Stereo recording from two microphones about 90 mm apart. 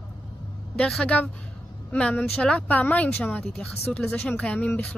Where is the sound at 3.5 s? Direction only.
5° left (ahead or behind).